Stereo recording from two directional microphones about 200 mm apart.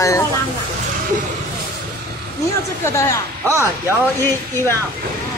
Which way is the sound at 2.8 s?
15° left (ahead or behind).